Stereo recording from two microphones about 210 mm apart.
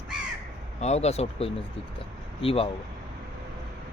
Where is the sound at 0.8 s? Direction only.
30° left (ahead or behind).